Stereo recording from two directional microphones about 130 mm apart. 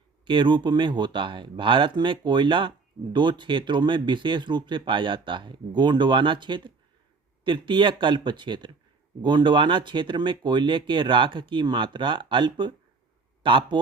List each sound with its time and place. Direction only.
0.3 s a man's voice: 40° right (ahead or behind)